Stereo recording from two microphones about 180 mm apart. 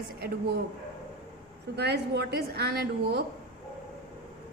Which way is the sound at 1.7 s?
70° right (ahead or behind).